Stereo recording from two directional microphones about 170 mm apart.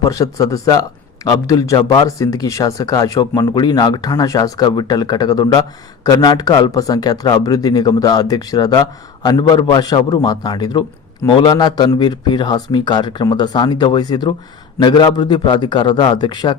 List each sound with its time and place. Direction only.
0.0 s a man's voice: 20° left (ahead or behind)